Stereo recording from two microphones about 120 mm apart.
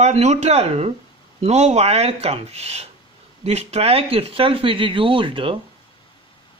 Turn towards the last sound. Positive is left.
turn(degrees=-45)  # may be behind; listen again after turning